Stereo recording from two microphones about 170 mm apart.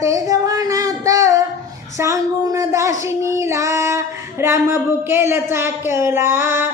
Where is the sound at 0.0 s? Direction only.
20° right (ahead or behind).